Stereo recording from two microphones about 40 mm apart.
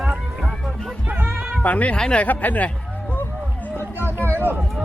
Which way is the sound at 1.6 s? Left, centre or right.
Left.